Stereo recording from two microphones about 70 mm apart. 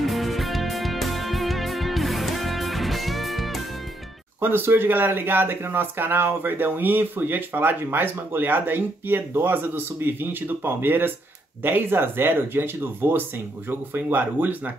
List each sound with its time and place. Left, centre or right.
0.0 s music: centre
4.4 s speech: right